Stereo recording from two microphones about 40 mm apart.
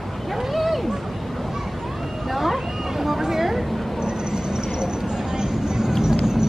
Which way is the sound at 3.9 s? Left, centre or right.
Centre.